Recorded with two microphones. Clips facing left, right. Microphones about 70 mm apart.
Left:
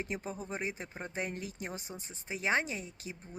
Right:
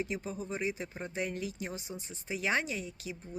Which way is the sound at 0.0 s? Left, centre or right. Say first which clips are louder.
Right 2 dB; left.